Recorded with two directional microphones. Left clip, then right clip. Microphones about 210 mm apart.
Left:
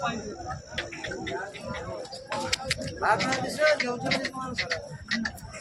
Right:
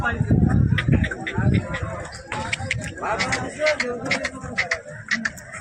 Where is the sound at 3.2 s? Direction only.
40° right (ahead or behind).